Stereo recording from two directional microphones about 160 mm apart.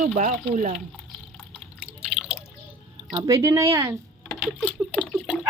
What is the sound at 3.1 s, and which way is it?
Speech, 20° right (ahead or behind).